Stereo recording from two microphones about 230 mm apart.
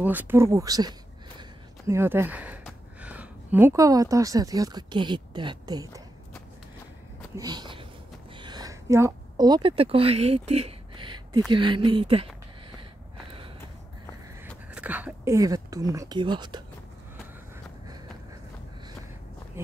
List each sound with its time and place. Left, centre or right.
0.0 s speech: centre
7.3 s a woman's voice: centre
14.4 s speech: centre